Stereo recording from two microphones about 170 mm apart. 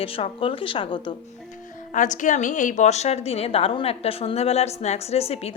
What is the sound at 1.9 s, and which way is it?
A woman's voice, 50° left (ahead or behind).